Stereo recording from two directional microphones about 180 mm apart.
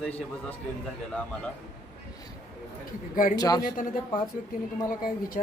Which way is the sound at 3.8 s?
45° left (ahead or behind).